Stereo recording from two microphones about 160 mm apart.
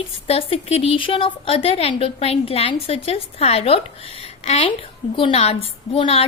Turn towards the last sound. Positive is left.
turn(degrees=35)  # may be behind; listen again after turning